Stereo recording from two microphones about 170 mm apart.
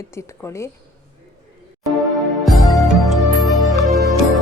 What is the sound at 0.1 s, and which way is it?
Speech, 15° left (ahead or behind).